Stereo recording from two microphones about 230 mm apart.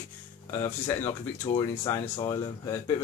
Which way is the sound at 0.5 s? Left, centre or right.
Centre.